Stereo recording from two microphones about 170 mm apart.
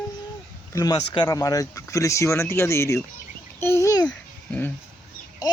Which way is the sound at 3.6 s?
15° left (ahead or behind).